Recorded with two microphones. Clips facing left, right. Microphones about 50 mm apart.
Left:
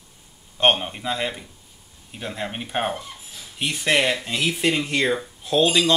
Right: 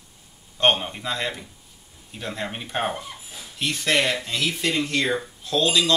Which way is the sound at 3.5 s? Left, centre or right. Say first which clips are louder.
Left 1 dB; centre.